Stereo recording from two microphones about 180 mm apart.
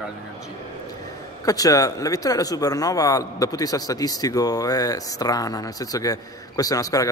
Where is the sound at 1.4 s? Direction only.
20° left (ahead or behind).